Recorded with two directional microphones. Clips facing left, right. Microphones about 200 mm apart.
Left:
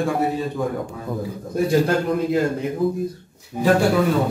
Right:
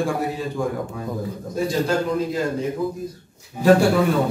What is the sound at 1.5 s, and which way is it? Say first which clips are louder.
Speech: left 3 dB; 55° left (ahead or behind).